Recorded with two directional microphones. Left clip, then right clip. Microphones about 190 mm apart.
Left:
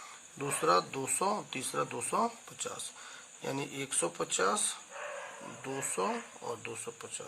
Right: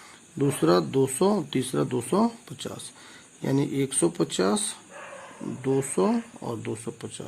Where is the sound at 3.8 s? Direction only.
20° right (ahead or behind).